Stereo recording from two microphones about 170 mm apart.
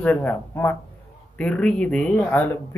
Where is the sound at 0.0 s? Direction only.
10° left (ahead or behind).